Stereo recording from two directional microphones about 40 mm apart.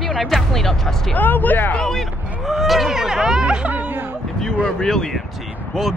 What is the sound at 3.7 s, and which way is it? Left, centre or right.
Music, right.